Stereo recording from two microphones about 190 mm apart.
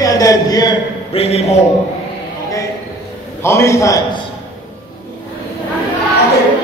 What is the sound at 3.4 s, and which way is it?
Speech, 15° left (ahead or behind).